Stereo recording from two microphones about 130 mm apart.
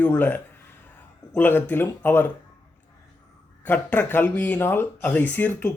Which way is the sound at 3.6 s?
15° left (ahead or behind).